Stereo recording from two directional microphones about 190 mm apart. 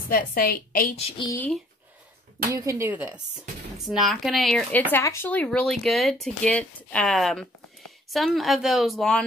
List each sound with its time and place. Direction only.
0.1 s a woman's voice: 50° left (ahead or behind)
0.9 s a woman's voice: 30° left (ahead or behind)
1.3 s speech: 10° left (ahead or behind)
2.5 s speech: 15° right (ahead or behind); by 9.2 s centre (ahead or behind)